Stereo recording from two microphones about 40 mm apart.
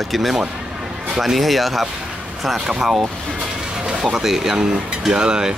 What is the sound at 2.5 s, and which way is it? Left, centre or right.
Cutlery, centre.